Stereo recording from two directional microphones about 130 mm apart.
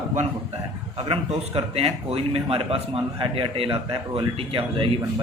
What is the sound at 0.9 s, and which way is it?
A man's voice, 45° right (ahead or behind).